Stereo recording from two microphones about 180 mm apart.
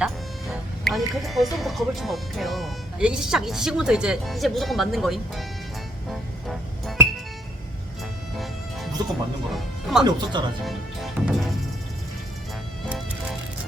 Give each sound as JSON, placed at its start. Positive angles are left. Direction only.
{"t": 0.0, "sound": "music", "side_deg": 0}
{"t": 1.5, "sound": "speech", "side_deg": 0}
{"t": 6.1, "sound": "music", "side_deg": 0}
{"t": 8.4, "sound": "music", "side_deg": 0}
{"t": 9.5, "sound": "speech", "side_deg": 0}
{"t": 10.0, "sound": "speech", "side_deg": -25}
{"t": 10.6, "sound": "music", "side_deg": 0}